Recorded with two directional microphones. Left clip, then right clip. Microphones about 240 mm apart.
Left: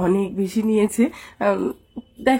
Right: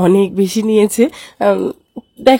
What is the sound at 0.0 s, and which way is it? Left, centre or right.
A woman's voice, right.